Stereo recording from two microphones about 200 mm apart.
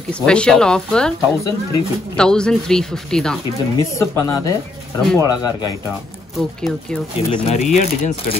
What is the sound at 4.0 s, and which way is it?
Speech, 15° left (ahead or behind).